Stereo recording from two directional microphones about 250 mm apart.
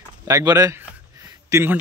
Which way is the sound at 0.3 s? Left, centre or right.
Centre.